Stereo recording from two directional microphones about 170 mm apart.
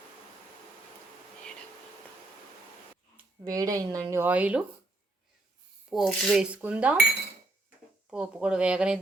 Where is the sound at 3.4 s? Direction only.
20° right (ahead or behind).